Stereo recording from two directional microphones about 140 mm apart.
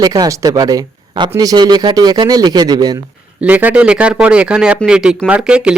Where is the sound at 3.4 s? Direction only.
10° right (ahead or behind).